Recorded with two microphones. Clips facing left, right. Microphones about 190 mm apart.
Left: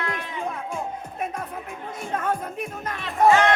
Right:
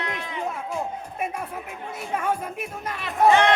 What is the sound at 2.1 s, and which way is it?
Speech, 10° right (ahead or behind).